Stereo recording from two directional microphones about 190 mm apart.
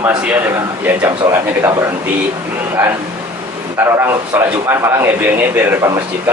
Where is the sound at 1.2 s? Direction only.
15° right (ahead or behind).